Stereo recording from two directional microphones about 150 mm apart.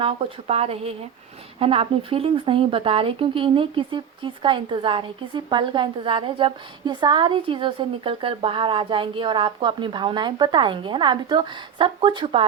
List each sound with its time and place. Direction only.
0.0 s speech: 40° right (ahead or behind)